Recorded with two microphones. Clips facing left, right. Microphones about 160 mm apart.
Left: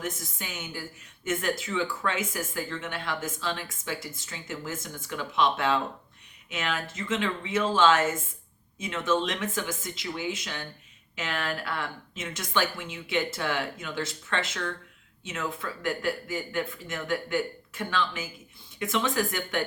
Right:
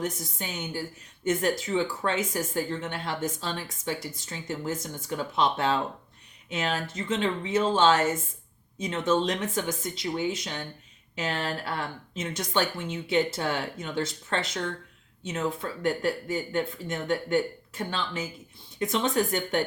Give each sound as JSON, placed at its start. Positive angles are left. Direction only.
{"t": 0.0, "sound": "speech", "side_deg": -30}